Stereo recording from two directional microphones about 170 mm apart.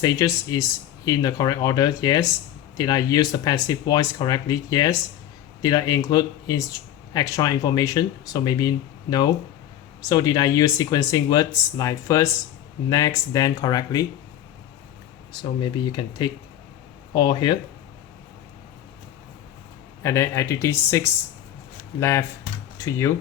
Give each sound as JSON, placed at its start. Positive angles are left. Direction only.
{"t": 0.0, "sound": "speech", "side_deg": 20}
{"t": 15.9, "sound": "speech", "side_deg": 25}
{"t": 20.0, "sound": "speech", "side_deg": 15}
{"t": 22.8, "sound": "speech", "side_deg": 15}